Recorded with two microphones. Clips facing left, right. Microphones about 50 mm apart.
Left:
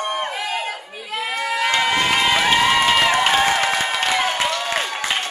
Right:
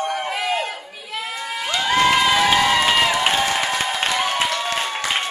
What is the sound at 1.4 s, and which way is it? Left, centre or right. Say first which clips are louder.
Crowd: left 9 dB; left.